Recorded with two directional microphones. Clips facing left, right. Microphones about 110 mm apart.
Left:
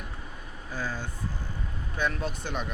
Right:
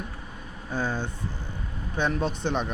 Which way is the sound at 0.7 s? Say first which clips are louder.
Right 5 dB; 25° right (ahead or behind).